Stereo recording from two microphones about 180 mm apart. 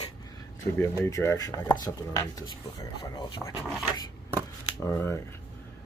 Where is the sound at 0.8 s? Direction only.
20° left (ahead or behind).